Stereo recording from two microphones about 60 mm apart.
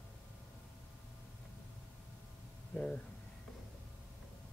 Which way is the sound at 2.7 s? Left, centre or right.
Centre.